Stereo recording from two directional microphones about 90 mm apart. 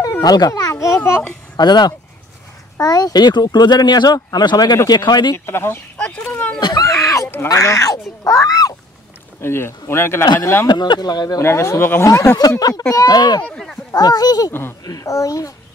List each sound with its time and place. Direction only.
0.2 s a child's voice: 45° left (ahead or behind)
1.6 s speech: 50° left (ahead or behind)
5.3 s speech: 30° left (ahead or behind)
5.9 s a sound: 10° left (ahead or behind)
6.6 s a sound: 40° left (ahead or behind)
7.4 s a child's voice: 35° left (ahead or behind)
9.4 s speech: 30° left (ahead or behind)
10.7 s speech: 55° left (ahead or behind)
11.4 s a child's voice: 30° left (ahead or behind)
12.4 s speech: 45° left (ahead or behind)
13.4 s speech: 10° left (ahead or behind)
13.9 s speech: 45° left (ahead or behind)
14.5 s speech: 25° left (ahead or behind)
14.9 s a child's voice: 40° left (ahead or behind)